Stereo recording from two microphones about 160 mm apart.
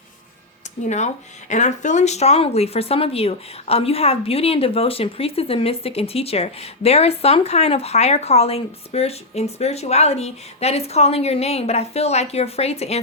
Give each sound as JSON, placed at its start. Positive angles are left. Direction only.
{"t": 0.9, "sound": "speech", "side_deg": 45}